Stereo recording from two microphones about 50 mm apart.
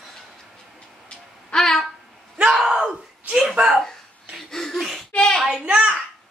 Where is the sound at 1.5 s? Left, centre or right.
Centre.